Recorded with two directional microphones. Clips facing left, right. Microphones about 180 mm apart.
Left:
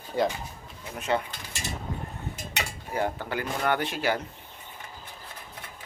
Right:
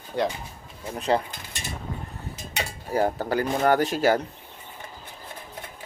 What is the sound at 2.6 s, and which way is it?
Speech, 40° right (ahead or behind).